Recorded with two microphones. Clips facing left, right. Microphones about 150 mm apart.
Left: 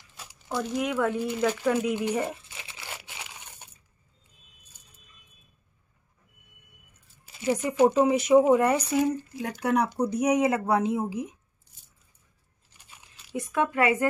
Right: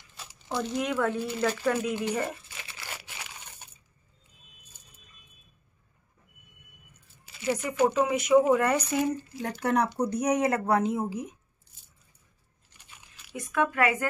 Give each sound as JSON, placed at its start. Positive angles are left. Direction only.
{"t": 0.1, "sound": "crumpling", "side_deg": 10}
{"t": 7.3, "sound": "speech", "side_deg": 20}
{"t": 8.4, "sound": "a woman's voice", "side_deg": 15}
{"t": 12.6, "sound": "a sound", "side_deg": 30}